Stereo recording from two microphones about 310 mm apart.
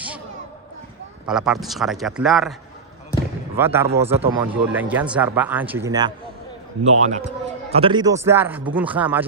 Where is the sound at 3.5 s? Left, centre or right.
Centre.